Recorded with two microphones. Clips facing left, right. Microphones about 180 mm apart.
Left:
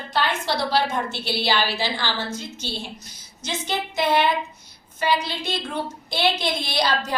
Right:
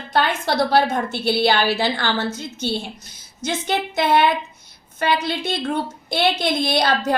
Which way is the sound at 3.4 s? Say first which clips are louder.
Right 5 dB; 55° right (ahead or behind).